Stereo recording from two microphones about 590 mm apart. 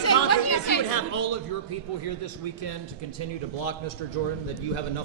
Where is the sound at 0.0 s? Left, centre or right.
Left.